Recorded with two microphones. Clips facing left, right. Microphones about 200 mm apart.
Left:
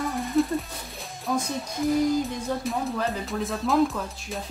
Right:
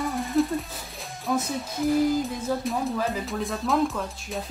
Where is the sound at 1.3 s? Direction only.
5° right (ahead or behind).